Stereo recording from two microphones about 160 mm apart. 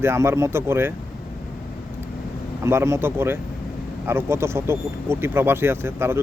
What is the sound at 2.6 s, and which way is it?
Speech, 15° right (ahead or behind).